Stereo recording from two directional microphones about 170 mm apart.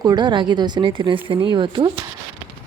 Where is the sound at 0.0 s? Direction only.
25° right (ahead or behind).